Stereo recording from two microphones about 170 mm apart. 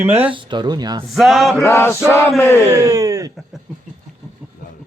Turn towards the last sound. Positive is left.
turn(degrees=-20)  # may be behind; listen again after turning